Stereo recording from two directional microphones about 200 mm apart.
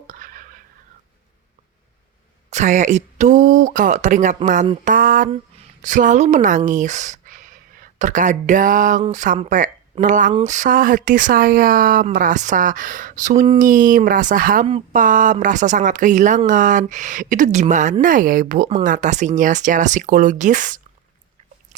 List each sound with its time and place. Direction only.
0.1 s whispering: 40° right (ahead or behind)
2.5 s a woman's voice: 35° right (ahead or behind)
4.9 s a sound: 45° right (ahead or behind)
5.8 s a woman's voice: 40° right (ahead or behind)